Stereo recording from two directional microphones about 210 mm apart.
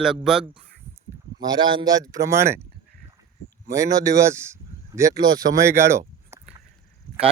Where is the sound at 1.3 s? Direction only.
20° right (ahead or behind).